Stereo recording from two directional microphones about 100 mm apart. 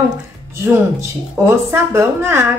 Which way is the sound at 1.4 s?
25° right (ahead or behind).